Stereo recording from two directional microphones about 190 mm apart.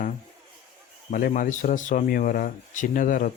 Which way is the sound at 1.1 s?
45° left (ahead or behind).